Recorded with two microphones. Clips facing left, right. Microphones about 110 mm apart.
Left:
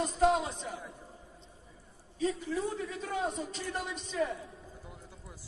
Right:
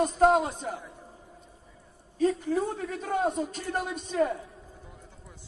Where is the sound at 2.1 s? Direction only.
50° right (ahead or behind).